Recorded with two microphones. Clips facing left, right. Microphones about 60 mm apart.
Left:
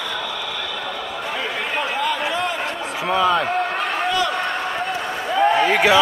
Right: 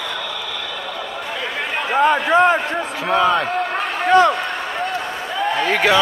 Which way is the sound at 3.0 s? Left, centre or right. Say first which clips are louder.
Right 1 dB; centre.